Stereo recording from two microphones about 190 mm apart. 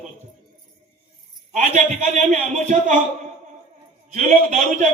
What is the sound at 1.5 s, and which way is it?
A man's voice, 40° right (ahead or behind).